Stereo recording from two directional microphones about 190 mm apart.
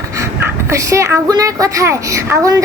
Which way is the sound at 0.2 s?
15° right (ahead or behind).